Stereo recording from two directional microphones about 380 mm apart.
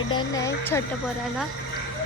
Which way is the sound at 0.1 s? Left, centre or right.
Centre.